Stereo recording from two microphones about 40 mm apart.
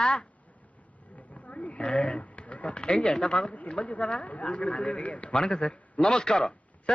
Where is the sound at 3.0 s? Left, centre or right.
Left.